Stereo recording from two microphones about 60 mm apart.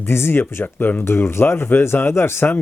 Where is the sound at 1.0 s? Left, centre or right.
Left.